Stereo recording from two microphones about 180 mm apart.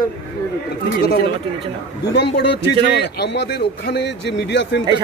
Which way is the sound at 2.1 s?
75° left (ahead or behind).